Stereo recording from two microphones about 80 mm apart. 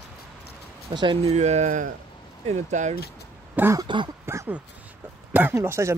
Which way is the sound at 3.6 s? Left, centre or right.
Right.